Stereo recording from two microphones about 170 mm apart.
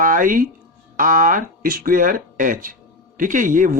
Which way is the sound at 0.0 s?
55° right (ahead or behind).